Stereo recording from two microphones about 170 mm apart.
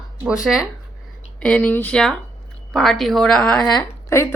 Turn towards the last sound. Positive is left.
turn(degrees=15)  # may be behind; listen again after turning